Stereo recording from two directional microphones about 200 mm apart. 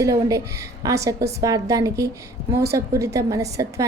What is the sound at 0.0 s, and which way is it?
A woman's voice, 15° right (ahead or behind).